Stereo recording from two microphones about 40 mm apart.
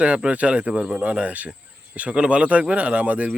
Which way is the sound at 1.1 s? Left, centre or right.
Right.